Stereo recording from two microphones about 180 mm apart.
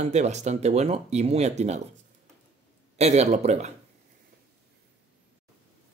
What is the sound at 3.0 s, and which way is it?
Speech, 35° right (ahead or behind).